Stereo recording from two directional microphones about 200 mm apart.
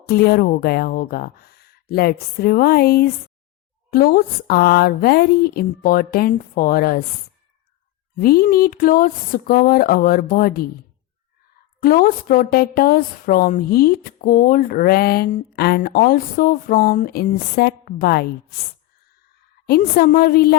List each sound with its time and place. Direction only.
0.0 s a woman's voice: 50° left (ahead or behind)
8.2 s a woman's voice: 45° left (ahead or behind)
11.8 s a woman's voice: 45° left (ahead or behind)
19.6 s a woman's voice: 45° left (ahead or behind)